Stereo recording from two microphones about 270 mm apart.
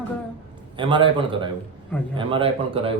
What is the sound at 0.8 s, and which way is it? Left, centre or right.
A man's voice, centre.